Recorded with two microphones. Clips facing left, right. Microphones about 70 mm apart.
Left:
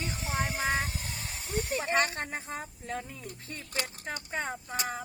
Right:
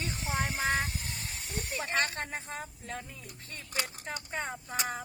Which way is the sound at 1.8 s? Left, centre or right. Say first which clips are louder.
Left 1 dB; left.